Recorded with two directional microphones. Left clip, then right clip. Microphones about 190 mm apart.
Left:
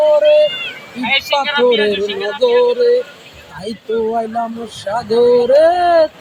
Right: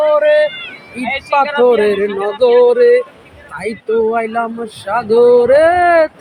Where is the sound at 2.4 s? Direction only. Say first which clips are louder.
Right 4 dB; centre (ahead or behind).